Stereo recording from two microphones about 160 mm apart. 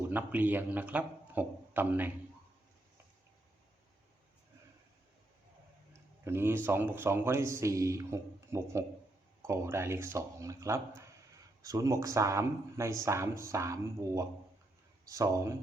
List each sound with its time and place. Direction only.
0.1 s speech: 10° right (ahead or behind)
6.2 s speech: 15° right (ahead or behind)